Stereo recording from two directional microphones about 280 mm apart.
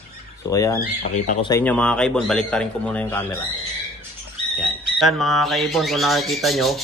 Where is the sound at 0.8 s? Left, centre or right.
Left.